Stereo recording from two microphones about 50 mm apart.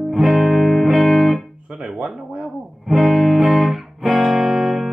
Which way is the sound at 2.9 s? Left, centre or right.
Centre.